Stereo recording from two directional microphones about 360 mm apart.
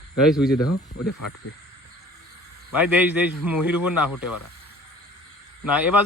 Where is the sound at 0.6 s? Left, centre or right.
Left.